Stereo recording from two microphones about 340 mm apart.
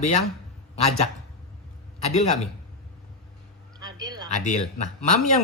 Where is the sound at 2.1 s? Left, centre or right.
Centre.